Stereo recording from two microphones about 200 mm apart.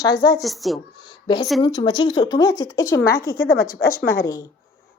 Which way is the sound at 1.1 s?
25° left (ahead or behind).